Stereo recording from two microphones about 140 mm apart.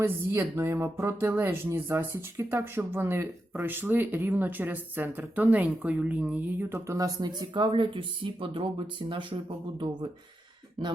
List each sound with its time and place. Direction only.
0.0 s speech: 20° right (ahead or behind); by 9.4 s 40° right (ahead or behind)